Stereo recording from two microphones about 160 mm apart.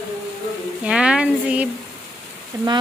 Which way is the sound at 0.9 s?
5° right (ahead or behind).